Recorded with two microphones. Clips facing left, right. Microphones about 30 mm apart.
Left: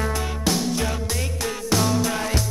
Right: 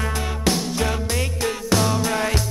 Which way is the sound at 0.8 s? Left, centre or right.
Right.